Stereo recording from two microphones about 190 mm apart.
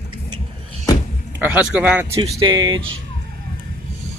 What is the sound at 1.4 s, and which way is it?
A man's voice, 5° right (ahead or behind).